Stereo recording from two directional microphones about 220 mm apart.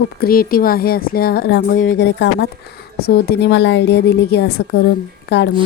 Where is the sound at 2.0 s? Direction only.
55° left (ahead or behind).